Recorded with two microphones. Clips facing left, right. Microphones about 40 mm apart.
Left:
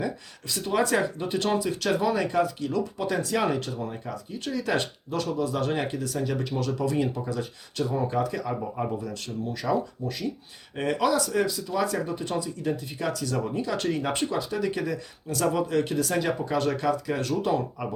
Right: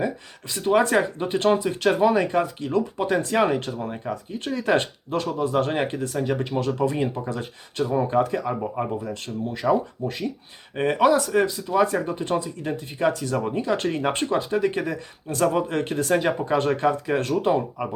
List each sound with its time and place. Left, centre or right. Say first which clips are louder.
0.0 s speech: right 4 dB; right
17.6 s speech: right 3 dB; centre